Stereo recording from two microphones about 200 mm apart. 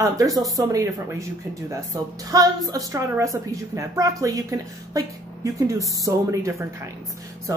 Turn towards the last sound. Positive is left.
turn(degrees=-15)  # may be behind; listen again after turning